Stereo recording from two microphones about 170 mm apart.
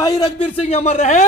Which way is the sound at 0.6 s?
40° left (ahead or behind).